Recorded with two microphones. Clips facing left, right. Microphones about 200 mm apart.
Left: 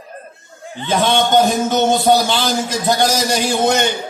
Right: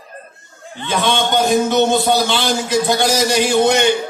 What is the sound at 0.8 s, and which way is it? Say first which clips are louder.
A man's voice: left 2 dB; 45° left (ahead or behind).